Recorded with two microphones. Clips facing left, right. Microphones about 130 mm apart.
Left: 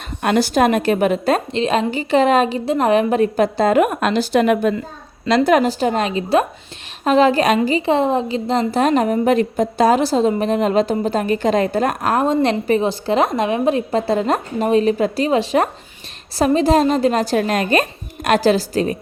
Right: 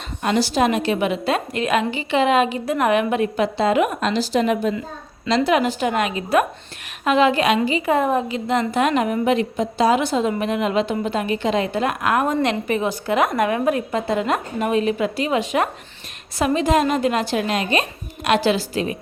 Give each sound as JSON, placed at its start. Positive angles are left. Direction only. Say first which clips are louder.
{"t": 0.2, "sound": "a woman's voice", "louder": "left 3 dB", "side_deg": 55}
{"t": 1.5, "sound": "speech", "louder": "left 3 dB", "side_deg": 30}
{"t": 5.3, "sound": "speech", "louder": "left 4 dB", "side_deg": 45}
{"t": 7.9, "sound": "speech", "louder": "left 2 dB", "side_deg": 25}